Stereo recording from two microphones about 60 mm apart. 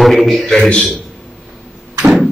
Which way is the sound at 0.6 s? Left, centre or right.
Centre.